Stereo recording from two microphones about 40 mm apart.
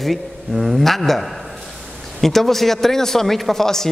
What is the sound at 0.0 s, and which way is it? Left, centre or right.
A man's voice, centre.